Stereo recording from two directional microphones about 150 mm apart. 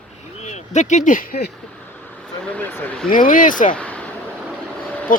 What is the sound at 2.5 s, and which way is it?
Speech, 10° left (ahead or behind).